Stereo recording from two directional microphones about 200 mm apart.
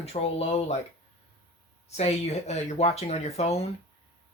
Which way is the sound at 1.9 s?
30° left (ahead or behind).